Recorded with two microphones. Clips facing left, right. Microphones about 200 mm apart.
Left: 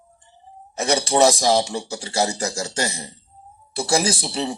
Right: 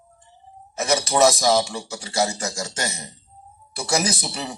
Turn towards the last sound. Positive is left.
turn(degrees=30)  # may be behind; listen again after turning